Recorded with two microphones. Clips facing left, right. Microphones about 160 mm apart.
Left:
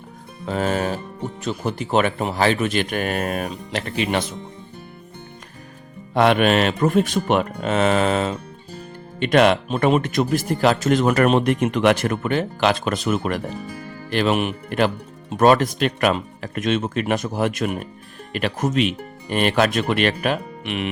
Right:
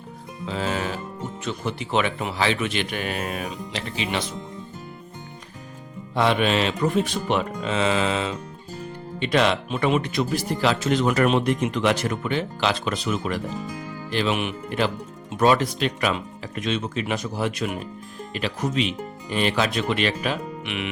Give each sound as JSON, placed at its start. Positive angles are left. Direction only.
{"t": 0.4, "sound": "music", "side_deg": 50}
{"t": 1.5, "sound": "speech", "side_deg": 45}
{"t": 6.1, "sound": "speech", "side_deg": 60}
{"t": 9.6, "sound": "speech", "side_deg": 40}
{"t": 20.7, "sound": "music", "side_deg": 40}